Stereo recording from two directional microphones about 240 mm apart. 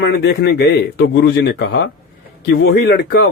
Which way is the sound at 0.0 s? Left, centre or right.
Left.